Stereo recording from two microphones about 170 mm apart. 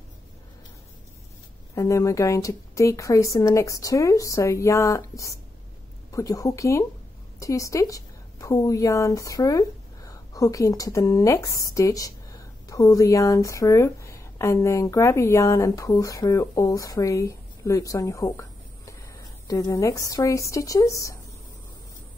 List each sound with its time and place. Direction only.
1.8 s a woman's voice: 20° left (ahead or behind)